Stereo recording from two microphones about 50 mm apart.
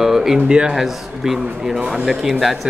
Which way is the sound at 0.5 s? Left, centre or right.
Centre.